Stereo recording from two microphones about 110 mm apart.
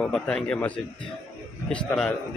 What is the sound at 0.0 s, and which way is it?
Speech, 10° left (ahead or behind).